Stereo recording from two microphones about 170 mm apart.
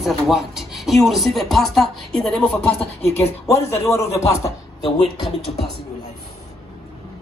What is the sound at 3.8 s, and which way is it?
Speech, 15° left (ahead or behind).